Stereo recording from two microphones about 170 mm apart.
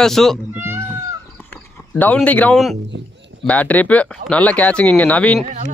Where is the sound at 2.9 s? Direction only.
90° right.